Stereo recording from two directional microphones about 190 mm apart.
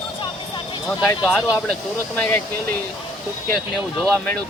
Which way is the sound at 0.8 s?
20° left (ahead or behind).